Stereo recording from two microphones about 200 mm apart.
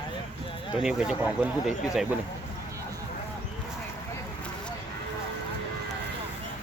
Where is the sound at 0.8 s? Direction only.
5° right (ahead or behind).